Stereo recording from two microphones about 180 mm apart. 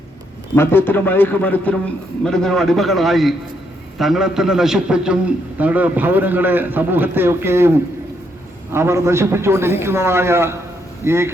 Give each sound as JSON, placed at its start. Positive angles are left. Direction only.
{"t": 0.5, "sound": "a man's voice", "side_deg": 15}
{"t": 8.7, "sound": "a man's voice", "side_deg": -15}